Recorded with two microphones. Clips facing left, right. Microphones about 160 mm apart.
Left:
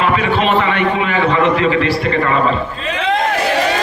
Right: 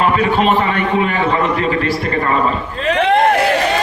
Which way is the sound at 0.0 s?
40° right (ahead or behind).